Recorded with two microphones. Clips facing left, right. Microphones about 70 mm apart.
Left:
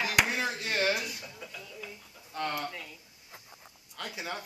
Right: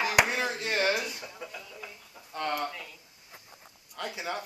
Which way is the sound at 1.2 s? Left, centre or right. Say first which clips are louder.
Right 3 dB; centre.